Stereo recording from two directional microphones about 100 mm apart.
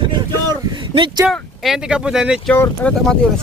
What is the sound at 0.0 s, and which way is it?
Vehicle, 50° right (ahead or behind).